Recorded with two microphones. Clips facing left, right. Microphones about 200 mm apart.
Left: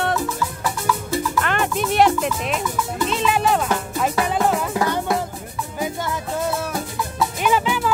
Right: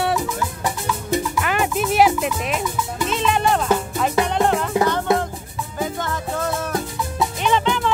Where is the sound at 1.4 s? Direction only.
5° right (ahead or behind).